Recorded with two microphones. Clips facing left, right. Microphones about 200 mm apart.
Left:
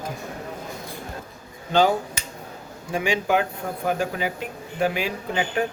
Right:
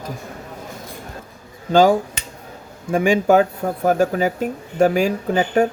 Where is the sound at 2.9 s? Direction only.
50° right (ahead or behind).